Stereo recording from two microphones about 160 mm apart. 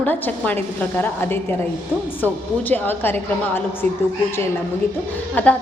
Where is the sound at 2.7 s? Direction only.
10° left (ahead or behind).